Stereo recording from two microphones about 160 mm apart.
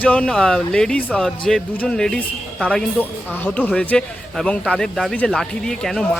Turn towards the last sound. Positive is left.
turn(degrees=5)  # may be behind; listen again after turning